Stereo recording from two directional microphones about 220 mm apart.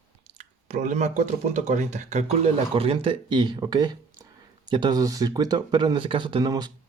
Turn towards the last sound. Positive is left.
turn(degrees=-20)  # may be behind; listen again after turning